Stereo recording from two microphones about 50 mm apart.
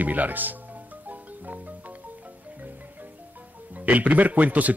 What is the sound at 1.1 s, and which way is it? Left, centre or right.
Music, right.